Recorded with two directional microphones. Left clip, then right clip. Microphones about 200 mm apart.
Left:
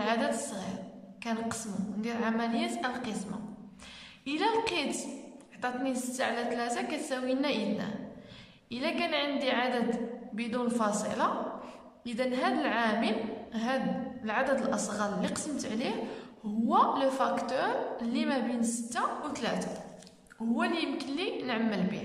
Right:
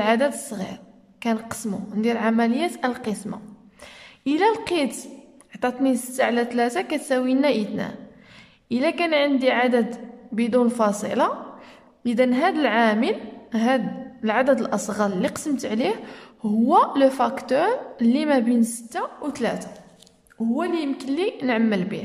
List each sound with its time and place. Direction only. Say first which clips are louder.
0.0 s a woman's voice: right 9 dB; 40° right (ahead or behind)
20.5 s a woman's voice: right 5 dB; 30° right (ahead or behind)